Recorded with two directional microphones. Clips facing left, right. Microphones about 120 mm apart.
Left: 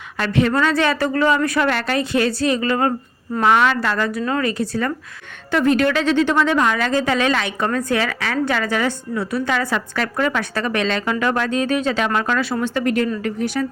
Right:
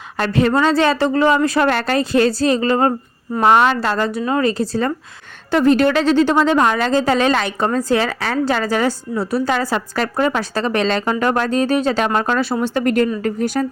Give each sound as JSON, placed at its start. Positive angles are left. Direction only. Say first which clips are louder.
{"t": 0.2, "sound": "a woman's voice", "louder": "right 2 dB", "side_deg": -35}
{"t": 13.2, "sound": "speech", "louder": "right 3 dB", "side_deg": -45}